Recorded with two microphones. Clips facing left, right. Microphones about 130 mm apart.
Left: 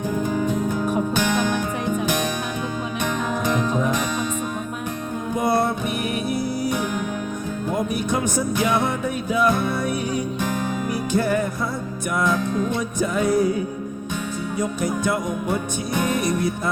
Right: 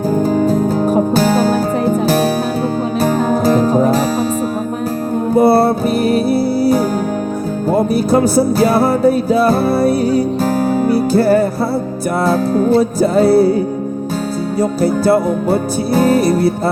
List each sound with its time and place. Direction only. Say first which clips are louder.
0.1 s music: right 9 dB; 35° right (ahead or behind)
5.3 s music: right 10 dB; 35° right (ahead or behind)
14.6 s music: right 10 dB; 35° right (ahead or behind)